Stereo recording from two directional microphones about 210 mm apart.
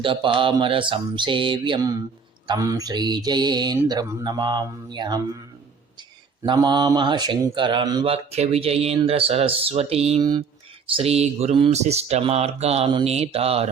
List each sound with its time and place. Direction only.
0.0 s speech: 25° right (ahead or behind)
6.4 s speech: 20° right (ahead or behind)